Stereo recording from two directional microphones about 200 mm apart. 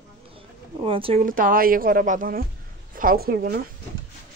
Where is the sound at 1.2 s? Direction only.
45° right (ahead or behind).